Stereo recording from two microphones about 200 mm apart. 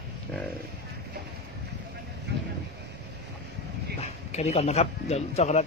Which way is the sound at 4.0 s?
35° left (ahead or behind).